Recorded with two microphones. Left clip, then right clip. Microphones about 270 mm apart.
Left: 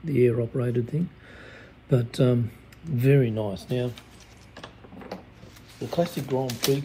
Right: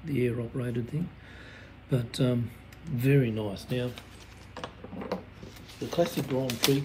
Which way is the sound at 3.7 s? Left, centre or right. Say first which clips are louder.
Left 4 dB; centre.